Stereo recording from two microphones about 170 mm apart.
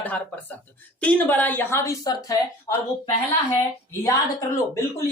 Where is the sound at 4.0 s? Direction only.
20° left (ahead or behind).